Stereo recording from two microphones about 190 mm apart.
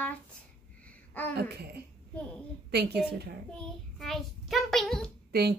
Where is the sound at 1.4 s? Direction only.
55° right (ahead or behind).